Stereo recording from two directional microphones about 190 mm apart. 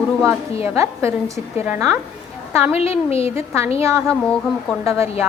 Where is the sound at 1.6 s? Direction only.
10° right (ahead or behind).